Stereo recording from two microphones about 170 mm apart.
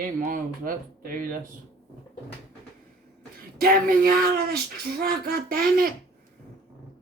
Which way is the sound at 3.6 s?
60° right (ahead or behind).